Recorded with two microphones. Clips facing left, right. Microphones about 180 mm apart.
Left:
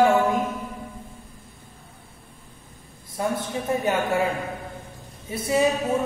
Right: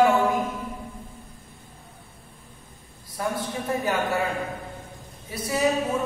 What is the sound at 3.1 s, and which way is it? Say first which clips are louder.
A man's voice: left 2 dB; 25° left (ahead or behind).